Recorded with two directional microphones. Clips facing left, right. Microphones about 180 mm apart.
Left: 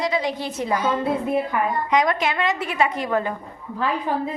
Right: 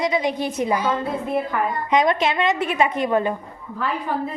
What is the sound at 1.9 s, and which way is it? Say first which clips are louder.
A woman's voice: right 3 dB; 25° right (ahead or behind).